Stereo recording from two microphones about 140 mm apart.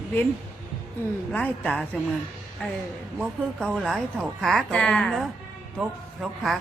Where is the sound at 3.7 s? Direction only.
Centre (ahead or behind).